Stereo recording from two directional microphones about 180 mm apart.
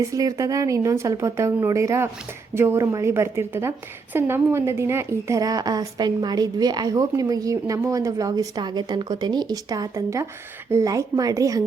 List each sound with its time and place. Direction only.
0.0 s a woman's voice: 20° right (ahead or behind)